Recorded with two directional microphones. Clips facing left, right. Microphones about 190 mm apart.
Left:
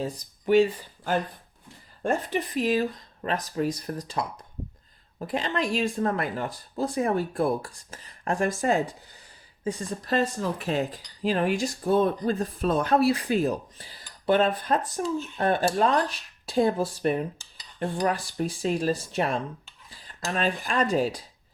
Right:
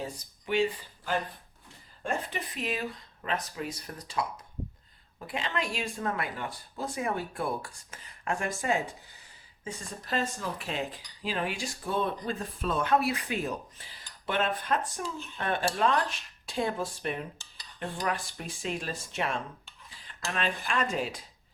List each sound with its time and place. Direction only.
0.4 s speech: 40° left (ahead or behind)